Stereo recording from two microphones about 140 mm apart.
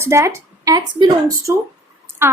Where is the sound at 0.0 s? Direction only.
20° right (ahead or behind).